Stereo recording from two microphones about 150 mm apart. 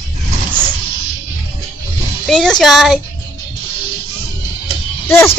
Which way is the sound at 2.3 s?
5° left (ahead or behind).